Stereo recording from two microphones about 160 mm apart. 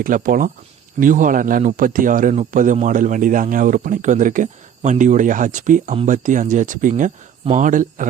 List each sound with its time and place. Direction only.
0.0 s speech: 60° right (ahead or behind)
2.3 s a man's voice: 45° right (ahead or behind)